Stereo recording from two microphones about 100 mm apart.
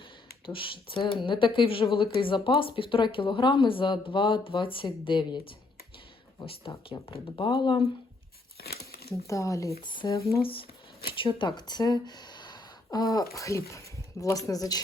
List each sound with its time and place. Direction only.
0.4 s speech: 60° left (ahead or behind)
6.8 s speech: 55° left (ahead or behind)
9.2 s speech: 30° left (ahead or behind)
9.8 s speech: 55° left (ahead or behind); by 14.8 s 35° left (ahead or behind)